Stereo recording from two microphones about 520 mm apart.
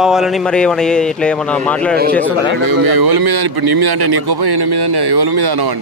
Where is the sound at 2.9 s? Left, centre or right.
Right.